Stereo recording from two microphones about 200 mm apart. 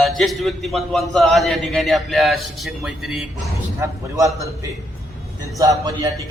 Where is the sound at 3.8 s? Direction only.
15° right (ahead or behind).